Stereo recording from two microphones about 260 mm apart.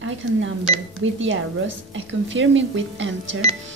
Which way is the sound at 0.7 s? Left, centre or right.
Right.